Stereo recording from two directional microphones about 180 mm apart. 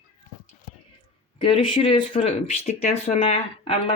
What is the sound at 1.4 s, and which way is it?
Speech, 30° left (ahead or behind).